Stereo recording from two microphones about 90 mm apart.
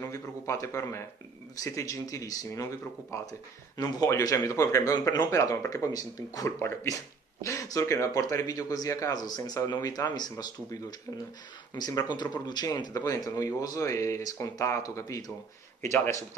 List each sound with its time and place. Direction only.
0.1 s speech: 35° left (ahead or behind)
6.6 s speech: 30° left (ahead or behind)